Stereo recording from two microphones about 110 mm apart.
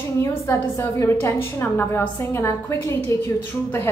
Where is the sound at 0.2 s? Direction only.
25° left (ahead or behind).